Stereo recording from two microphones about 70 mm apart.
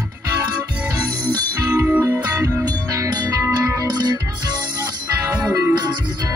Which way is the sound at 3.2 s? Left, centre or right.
Right.